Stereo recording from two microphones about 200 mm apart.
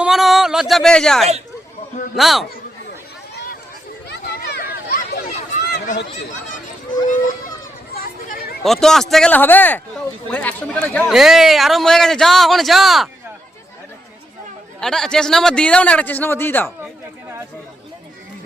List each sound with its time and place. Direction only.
0.0 s a sound: centre (ahead or behind)
2.1 s speech: centre (ahead or behind)
3.3 s a sound: 50° left (ahead or behind)
4.1 s children playing: 55° left (ahead or behind)
8.6 s speech: centre (ahead or behind)
14.8 s speech: 5° left (ahead or behind)